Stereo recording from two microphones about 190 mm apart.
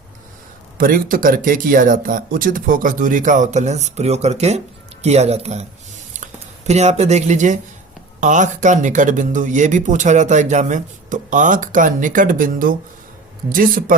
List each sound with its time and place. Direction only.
0.8 s speech: 45° right (ahead or behind)
6.1 s a sound: 40° right (ahead or behind)
6.7 s speech: 35° right (ahead or behind)